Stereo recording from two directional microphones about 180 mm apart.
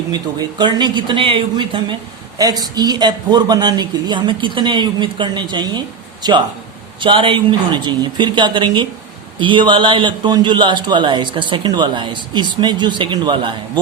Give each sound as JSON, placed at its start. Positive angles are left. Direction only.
{"t": 0.1, "sound": "a man's voice", "side_deg": -25}